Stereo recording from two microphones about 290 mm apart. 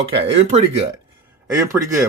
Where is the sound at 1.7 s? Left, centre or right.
Centre.